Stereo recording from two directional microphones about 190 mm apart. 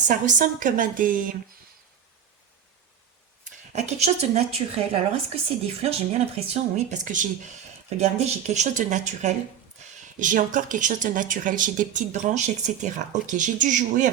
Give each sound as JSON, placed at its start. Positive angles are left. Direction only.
{"t": 0.1, "sound": "speech", "side_deg": -45}
{"t": 3.4, "sound": "a woman's voice", "side_deg": -35}